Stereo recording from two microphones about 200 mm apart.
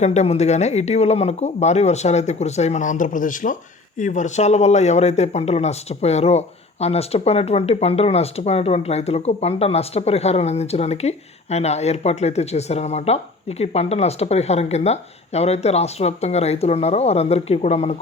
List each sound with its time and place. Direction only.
0.0 s speech: 35° left (ahead or behind)